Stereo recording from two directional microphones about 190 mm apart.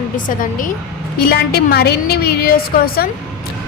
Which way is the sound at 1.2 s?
55° left (ahead or behind).